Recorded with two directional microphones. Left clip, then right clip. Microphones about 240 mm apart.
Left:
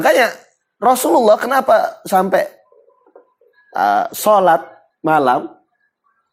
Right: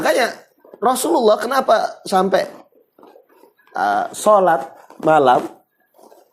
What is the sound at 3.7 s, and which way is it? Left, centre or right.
Speech, left.